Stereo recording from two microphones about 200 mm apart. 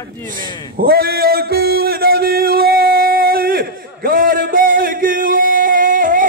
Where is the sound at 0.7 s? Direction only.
50° right (ahead or behind).